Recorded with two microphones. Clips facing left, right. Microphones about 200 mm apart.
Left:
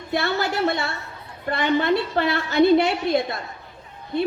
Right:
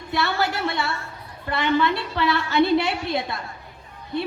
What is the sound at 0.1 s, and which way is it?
A woman's voice, 50° left (ahead or behind).